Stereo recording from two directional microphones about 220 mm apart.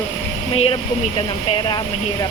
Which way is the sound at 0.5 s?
25° left (ahead or behind).